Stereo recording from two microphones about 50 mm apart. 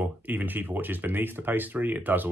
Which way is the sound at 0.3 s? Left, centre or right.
Right.